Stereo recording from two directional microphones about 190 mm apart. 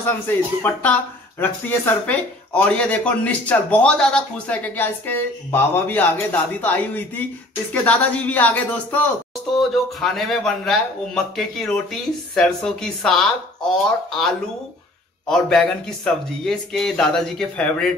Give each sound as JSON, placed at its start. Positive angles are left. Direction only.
{"t": 0.6, "sound": "a man's voice", "side_deg": 10}